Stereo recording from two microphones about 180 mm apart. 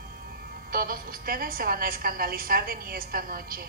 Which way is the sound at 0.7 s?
55° right (ahead or behind).